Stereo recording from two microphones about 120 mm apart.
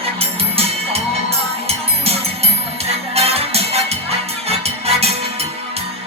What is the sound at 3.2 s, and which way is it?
Music, 60° right (ahead or behind).